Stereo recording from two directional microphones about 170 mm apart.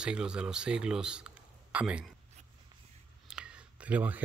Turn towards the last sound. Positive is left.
turn(degrees=-10)  # may be behind; listen again after turning